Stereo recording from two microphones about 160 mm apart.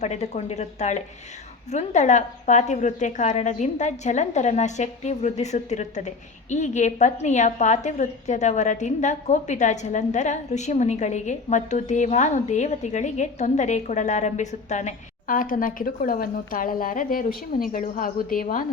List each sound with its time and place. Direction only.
0.0 s a woman's voice: 45° left (ahead or behind); by 18.6 s 60° left (ahead or behind)